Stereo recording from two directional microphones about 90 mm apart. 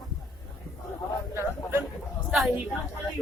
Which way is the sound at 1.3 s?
30° right (ahead or behind).